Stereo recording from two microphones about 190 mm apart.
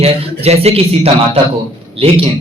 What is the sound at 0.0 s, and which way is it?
A man's voice, 35° right (ahead or behind).